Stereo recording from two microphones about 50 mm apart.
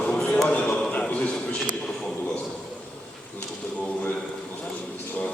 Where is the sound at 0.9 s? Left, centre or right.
Left.